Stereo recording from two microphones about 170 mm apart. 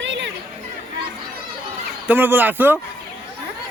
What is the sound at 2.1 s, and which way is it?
Speech, 10° right (ahead or behind).